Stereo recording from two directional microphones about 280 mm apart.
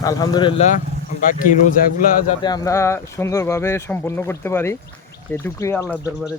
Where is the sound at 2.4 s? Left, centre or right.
Centre.